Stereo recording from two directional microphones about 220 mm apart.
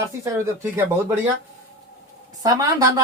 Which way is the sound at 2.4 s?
15° right (ahead or behind).